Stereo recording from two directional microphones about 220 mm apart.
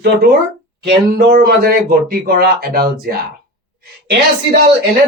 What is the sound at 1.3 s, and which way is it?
Speech, 40° right (ahead or behind).